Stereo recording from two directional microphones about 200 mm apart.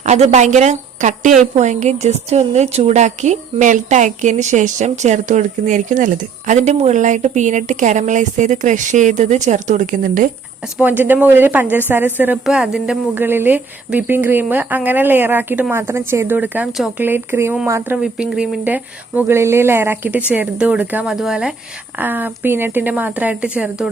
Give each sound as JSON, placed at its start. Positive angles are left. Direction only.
{"t": 0.0, "sound": "a woman's voice", "side_deg": -35}
{"t": 10.8, "sound": "a woman's voice", "side_deg": -10}